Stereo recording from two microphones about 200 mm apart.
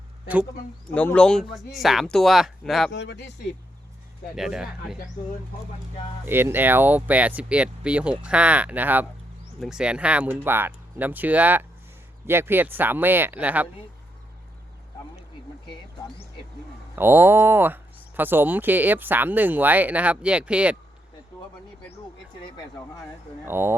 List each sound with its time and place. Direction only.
0.9 s speech: 5° left (ahead or behind)
2.9 s speech: 60° left (ahead or behind)
4.4 s speech: centre (ahead or behind)
6.2 s speech: 10° right (ahead or behind)
16.9 s speech: 10° right (ahead or behind)
22.4 s a sound: 25° left (ahead or behind)
23.5 s speech: 10° right (ahead or behind)